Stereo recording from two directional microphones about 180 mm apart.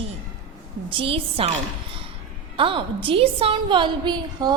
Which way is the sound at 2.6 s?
30° right (ahead or behind).